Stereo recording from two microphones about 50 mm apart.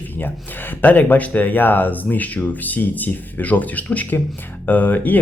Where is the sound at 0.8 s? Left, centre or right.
Left.